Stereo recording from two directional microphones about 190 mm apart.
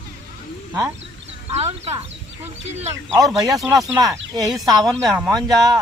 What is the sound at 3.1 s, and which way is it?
Speech, 20° right (ahead or behind).